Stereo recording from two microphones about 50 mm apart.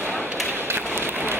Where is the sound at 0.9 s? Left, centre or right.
Right.